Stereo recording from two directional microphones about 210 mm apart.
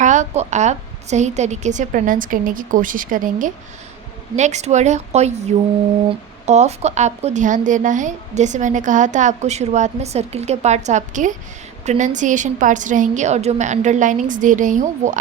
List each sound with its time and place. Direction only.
0.0 s a woman's voice: 35° right (ahead or behind)
6.4 s a woman's voice: 30° right (ahead or behind)